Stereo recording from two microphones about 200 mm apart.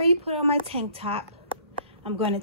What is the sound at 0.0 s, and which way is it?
A woman's voice, 30° right (ahead or behind).